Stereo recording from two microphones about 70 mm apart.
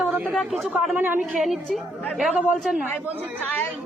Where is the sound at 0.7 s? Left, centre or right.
Right.